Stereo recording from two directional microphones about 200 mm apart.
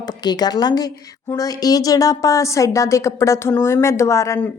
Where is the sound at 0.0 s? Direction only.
20° left (ahead or behind).